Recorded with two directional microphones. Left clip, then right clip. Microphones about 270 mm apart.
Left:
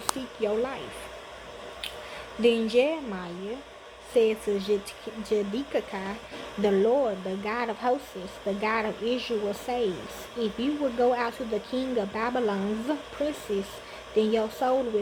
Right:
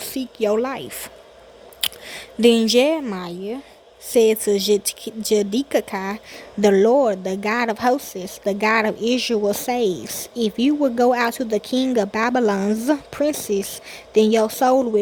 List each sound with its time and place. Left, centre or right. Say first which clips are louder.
0.2 s speech: right 11 dB; right
2.4 s speech: right 7 dB; right